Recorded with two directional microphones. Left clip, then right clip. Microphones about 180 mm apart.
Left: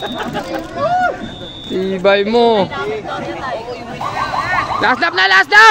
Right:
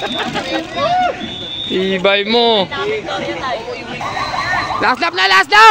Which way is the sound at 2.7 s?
45° right (ahead or behind).